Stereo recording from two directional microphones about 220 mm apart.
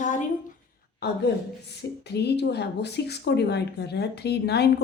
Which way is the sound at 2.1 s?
50° left (ahead or behind).